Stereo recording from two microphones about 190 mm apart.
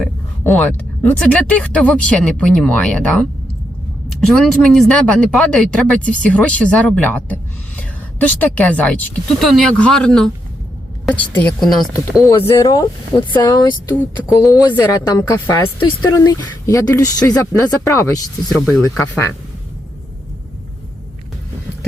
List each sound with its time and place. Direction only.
1.2 s speech: 5° left (ahead or behind)
4.3 s speech: centre (ahead or behind)
12.4 s speech: 25° left (ahead or behind)
18.4 s speech: centre (ahead or behind)
18.7 s speech: 15° left (ahead or behind)